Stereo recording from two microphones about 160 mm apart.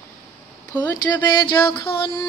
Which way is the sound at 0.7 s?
10° left (ahead or behind).